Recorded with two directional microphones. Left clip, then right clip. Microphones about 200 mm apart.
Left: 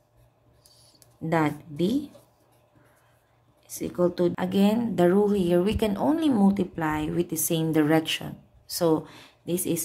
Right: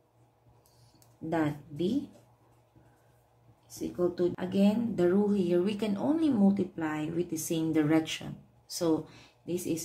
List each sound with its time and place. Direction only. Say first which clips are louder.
1.3 s speech: left 6 dB; 45° left (ahead or behind)
3.6 s speech: left 6 dB; 45° left (ahead or behind)